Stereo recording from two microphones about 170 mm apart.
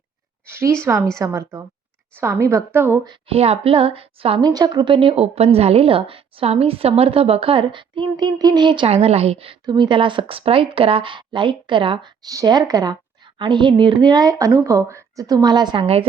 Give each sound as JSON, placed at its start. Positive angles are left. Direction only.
{"t": 0.4, "sound": "a sound", "side_deg": -15}
{"t": 1.2, "sound": "a woman's voice", "side_deg": -15}
{"t": 3.1, "sound": "a woman's voice", "side_deg": -35}